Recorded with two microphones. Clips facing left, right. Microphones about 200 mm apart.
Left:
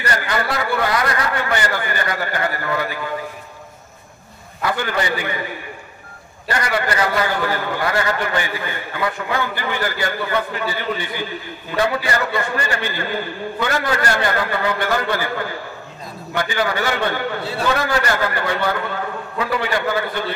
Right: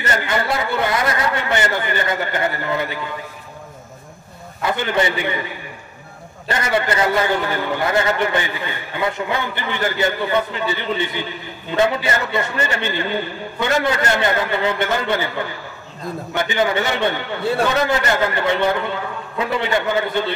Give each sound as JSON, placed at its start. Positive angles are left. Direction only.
{"t": 0.0, "sound": "a man's voice", "side_deg": -25}
{"t": 4.6, "sound": "a man's voice", "side_deg": -20}
{"t": 6.5, "sound": "a man's voice", "side_deg": -25}